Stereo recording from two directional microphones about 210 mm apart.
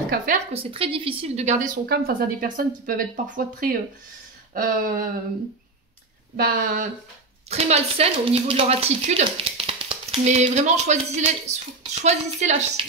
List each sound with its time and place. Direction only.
0.5 s a woman's voice: 25° right (ahead or behind)
1.9 s a woman's voice: 45° right (ahead or behind)
6.3 s speech: 45° right (ahead or behind)
7.4 s a woman's voice: 30° right (ahead or behind)